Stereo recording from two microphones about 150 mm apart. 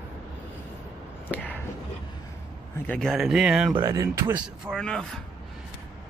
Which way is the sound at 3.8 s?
20° right (ahead or behind).